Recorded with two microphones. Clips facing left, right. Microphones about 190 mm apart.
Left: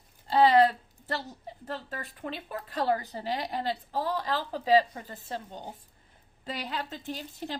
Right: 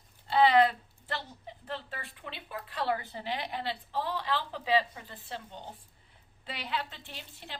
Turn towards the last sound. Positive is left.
turn(degrees=40)  # may be behind; listen again after turning